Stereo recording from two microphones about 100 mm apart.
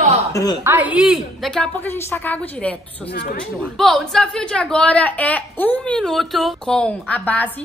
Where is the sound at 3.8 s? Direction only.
5° left (ahead or behind).